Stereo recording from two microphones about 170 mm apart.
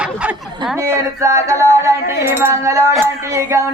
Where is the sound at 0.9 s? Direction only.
15° right (ahead or behind).